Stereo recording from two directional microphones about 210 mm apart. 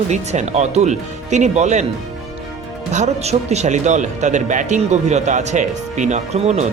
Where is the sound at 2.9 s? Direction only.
35° right (ahead or behind).